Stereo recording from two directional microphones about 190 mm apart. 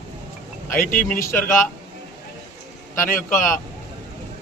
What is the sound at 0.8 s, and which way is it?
Speech, 45° left (ahead or behind).